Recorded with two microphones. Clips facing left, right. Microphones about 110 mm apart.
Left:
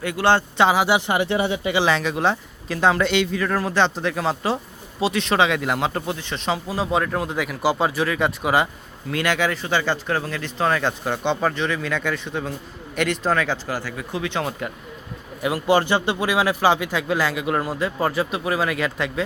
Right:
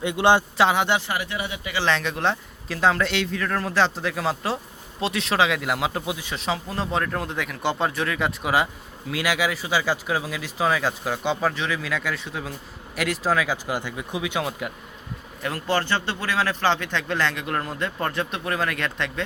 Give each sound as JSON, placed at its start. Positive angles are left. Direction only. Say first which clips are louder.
{"t": 0.0, "sound": "speech", "louder": "even", "side_deg": -20}
{"t": 0.5, "sound": "a man's voice", "louder": "left 2 dB", "side_deg": 0}
{"t": 0.9, "sound": "speech", "louder": "left 6 dB", "side_deg": 25}
{"t": 1.9, "sound": "a man's voice", "louder": "left 3 dB", "side_deg": 5}
{"t": 13.7, "sound": "speech", "louder": "even", "side_deg": -20}
{"t": 15.4, "sound": "a man's voice", "louder": "left 6 dB", "side_deg": 10}